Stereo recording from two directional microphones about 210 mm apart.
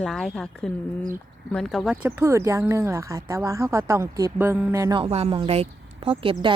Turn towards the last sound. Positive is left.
turn(degrees=-25)  # may be behind; listen again after turning